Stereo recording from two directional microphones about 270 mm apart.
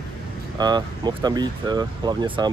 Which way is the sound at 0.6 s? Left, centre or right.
Centre.